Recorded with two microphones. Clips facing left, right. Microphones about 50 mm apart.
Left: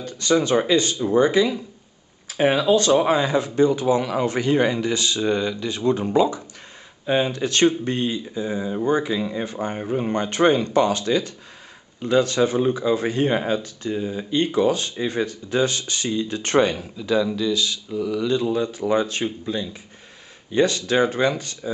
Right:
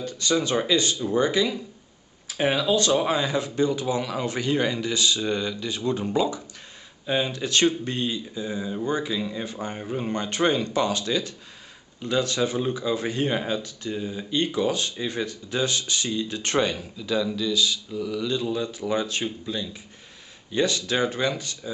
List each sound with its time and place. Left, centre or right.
0.0 s speech: left
10.1 s speech: left
17.0 s speech: left